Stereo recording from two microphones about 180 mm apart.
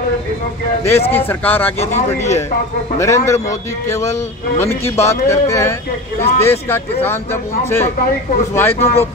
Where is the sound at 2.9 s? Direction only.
15° left (ahead or behind).